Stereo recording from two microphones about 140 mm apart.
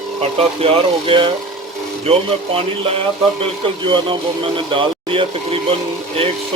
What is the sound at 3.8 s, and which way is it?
A man's voice, 35° right (ahead or behind).